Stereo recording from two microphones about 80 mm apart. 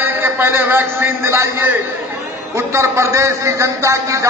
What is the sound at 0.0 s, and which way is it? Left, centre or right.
A man's voice, right.